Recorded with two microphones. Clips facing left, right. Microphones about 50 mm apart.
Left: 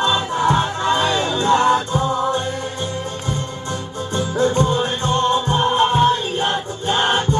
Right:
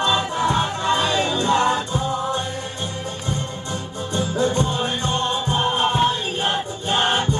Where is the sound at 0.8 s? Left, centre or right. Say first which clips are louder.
Left 2 dB; left.